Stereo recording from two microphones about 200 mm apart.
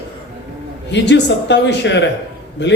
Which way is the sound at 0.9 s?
60° left (ahead or behind).